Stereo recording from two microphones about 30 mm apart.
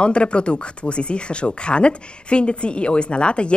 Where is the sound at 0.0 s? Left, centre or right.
Left.